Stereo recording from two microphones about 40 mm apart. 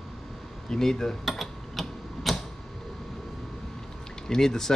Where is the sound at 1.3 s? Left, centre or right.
Centre.